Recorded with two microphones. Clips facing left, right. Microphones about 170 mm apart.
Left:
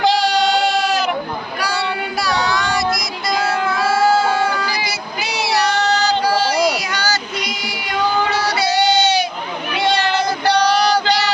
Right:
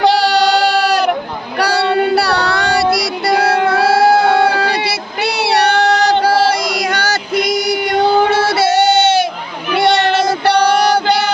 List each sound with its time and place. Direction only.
0.0 s child singing: 65° right (ahead or behind); by 9.2 s 50° right (ahead or behind)
10.5 s female singing: 60° right (ahead or behind)